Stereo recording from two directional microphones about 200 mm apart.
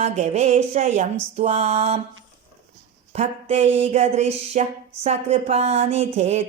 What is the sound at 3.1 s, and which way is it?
Speech, 30° right (ahead or behind).